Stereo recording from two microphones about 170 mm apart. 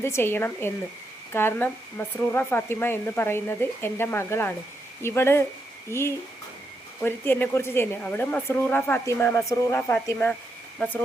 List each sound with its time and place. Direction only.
0.0 s speech: 15° left (ahead or behind)